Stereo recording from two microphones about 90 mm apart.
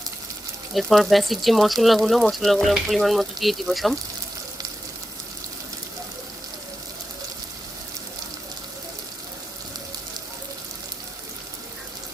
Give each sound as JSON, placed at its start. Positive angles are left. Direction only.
{"t": 0.7, "sound": "speech", "side_deg": 0}